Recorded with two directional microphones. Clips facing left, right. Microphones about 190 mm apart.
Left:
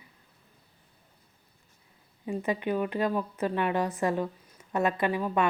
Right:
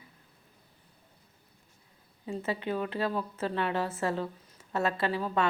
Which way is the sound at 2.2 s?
15° left (ahead or behind).